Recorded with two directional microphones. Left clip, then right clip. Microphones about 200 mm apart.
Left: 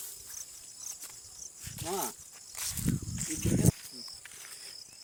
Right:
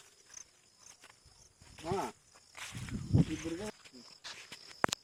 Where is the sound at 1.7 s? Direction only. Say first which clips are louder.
Left 1 dB; 20° left (ahead or behind).